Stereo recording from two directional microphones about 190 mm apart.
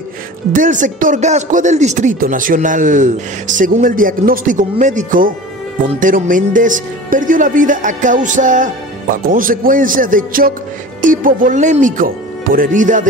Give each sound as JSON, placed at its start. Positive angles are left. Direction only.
{"t": 0.5, "sound": "speech", "side_deg": -45}